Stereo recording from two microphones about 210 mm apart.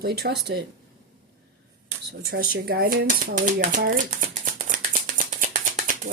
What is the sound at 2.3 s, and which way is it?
Typewriter, 45° right (ahead or behind).